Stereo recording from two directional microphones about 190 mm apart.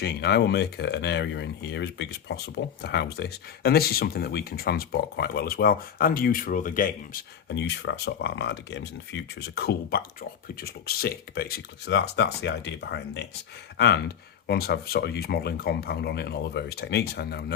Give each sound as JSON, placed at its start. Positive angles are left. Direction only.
{"t": 0.0, "sound": "speech", "side_deg": 60}
{"t": 7.5, "sound": "speech", "side_deg": 65}